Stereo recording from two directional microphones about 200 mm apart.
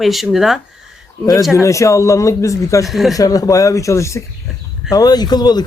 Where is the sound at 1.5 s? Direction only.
15° left (ahead or behind).